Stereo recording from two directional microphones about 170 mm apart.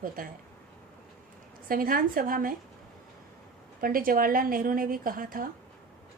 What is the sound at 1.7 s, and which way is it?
Speech, 55° right (ahead or behind).